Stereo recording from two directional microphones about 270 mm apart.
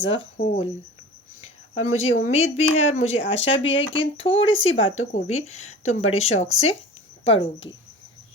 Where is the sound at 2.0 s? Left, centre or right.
Left.